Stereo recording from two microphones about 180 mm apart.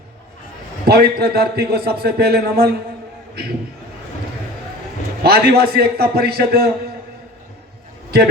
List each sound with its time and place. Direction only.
0.9 s a man's voice: 60° right (ahead or behind)
5.2 s a man's voice: 60° right (ahead or behind)